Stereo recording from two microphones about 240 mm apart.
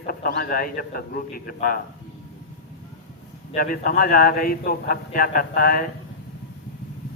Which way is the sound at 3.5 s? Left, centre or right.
Left.